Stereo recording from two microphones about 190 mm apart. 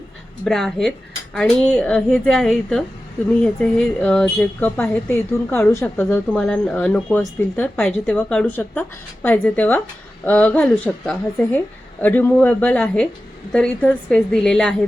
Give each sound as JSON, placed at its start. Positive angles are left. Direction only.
{"t": 0.4, "sound": "a woman's voice", "side_deg": 0}